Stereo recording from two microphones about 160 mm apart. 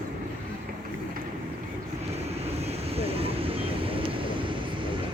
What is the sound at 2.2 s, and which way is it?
Vehicle, 40° right (ahead or behind).